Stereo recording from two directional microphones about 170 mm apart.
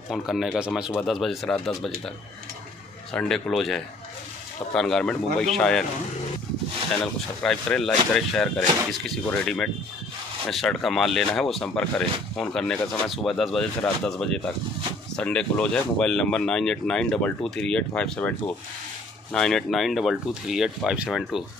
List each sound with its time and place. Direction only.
0.1 s speech: centre (ahead or behind)
3.1 s speech: 5° left (ahead or behind)
7.4 s speech: 5° left (ahead or behind)
19.3 s speech: 5° left (ahead or behind)